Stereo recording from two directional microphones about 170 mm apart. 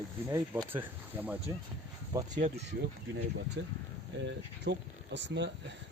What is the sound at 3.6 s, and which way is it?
Speech, 90° right.